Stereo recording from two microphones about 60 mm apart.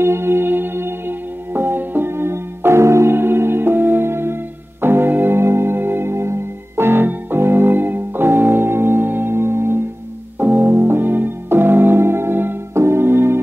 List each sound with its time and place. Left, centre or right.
0.0 s music: right
10.4 s music: right
10.7 s music: right